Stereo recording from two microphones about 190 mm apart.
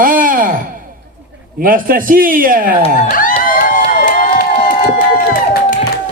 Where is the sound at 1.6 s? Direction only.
45° right (ahead or behind).